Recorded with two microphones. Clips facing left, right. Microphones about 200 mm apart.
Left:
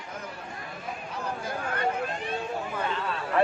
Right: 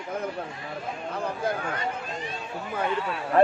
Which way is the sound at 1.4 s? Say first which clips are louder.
Right 10 dB; 60° right (ahead or behind).